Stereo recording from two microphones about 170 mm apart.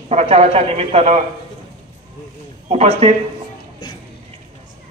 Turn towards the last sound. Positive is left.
turn(degrees=-35)  # may be behind; listen again after turning